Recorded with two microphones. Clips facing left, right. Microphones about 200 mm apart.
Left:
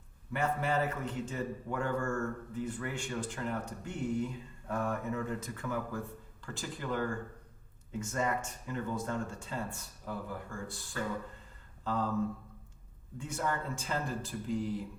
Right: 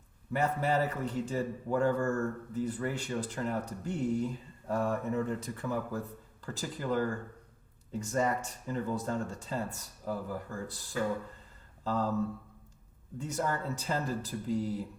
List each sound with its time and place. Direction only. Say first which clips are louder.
0.3 s speech: right 2 dB; 40° right (ahead or behind)
11.8 s a sound: right 2 dB; 40° right (ahead or behind)
13.1 s speech: right 2 dB; 40° right (ahead or behind)